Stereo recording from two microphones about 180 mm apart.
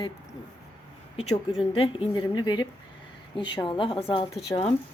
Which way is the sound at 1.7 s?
30° left (ahead or behind).